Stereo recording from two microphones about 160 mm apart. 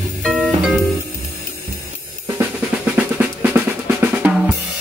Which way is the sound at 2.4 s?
10° right (ahead or behind).